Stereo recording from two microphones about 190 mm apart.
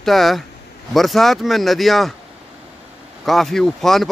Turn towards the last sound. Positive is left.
turn(degrees=0)  # may be behind; listen again after turning